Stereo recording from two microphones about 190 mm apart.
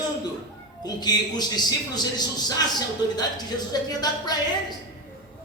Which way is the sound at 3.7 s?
20° left (ahead or behind).